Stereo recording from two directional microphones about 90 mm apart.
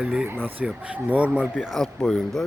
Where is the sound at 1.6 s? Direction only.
Centre (ahead or behind).